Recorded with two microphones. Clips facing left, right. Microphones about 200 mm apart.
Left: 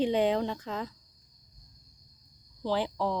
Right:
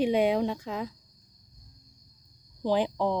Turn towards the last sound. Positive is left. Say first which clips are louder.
# right 4 dB
turn(degrees=-15)  # may be behind; listen again after turning